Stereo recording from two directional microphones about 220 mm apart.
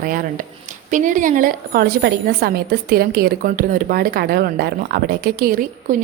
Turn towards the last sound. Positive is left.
turn(degrees=-40)  # may be behind; listen again after turning